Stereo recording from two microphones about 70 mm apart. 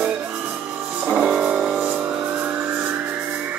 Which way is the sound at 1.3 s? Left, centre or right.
Centre.